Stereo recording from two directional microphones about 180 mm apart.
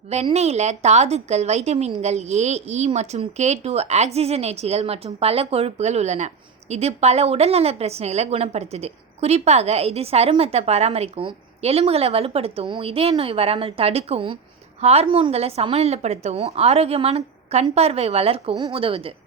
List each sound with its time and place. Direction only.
0.1 s a woman's voice: 35° right (ahead or behind)